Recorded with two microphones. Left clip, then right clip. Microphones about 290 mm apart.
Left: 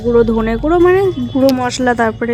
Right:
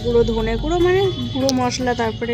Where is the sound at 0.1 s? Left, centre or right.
Centre.